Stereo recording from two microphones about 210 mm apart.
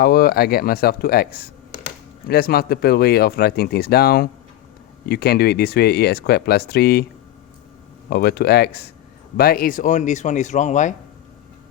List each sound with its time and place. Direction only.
0.0 s speech: 45° left (ahead or behind)
8.1 s speech: 50° left (ahead or behind)